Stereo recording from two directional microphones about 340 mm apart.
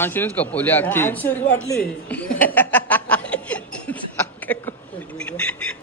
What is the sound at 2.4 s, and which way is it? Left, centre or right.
Chuckle, centre.